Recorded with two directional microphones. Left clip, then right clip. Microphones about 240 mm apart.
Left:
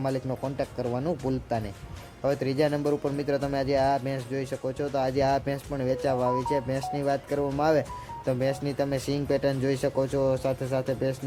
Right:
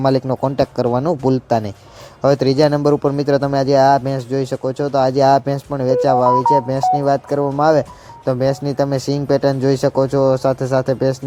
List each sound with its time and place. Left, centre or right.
0.0 s speech: right